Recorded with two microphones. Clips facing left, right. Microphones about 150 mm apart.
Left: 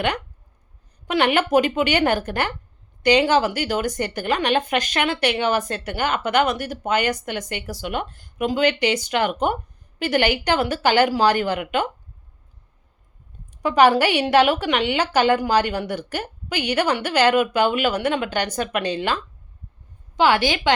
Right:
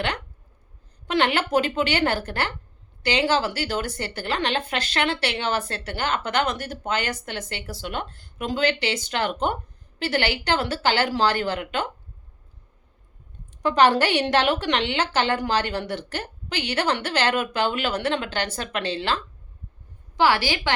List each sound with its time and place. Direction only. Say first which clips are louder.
1.0 s a woman's voice: left 3 dB; 15° left (ahead or behind)
13.6 s a woman's voice: left 3 dB; 10° left (ahead or behind)